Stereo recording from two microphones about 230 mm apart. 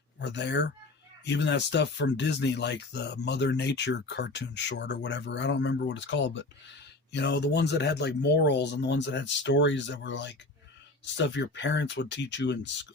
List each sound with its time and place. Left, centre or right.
0.2 s speech: left